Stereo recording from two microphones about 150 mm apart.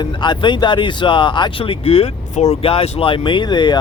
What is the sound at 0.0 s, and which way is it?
Speech, 30° left (ahead or behind).